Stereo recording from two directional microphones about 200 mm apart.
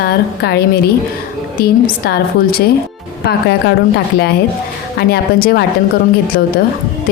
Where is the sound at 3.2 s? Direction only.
55° left (ahead or behind).